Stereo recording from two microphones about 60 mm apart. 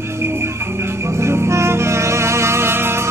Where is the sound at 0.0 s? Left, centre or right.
Right.